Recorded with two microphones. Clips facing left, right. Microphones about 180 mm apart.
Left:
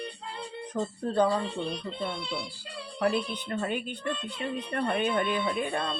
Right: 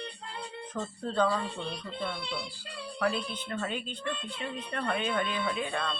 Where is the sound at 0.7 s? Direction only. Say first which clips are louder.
Left 4 dB; 15° left (ahead or behind).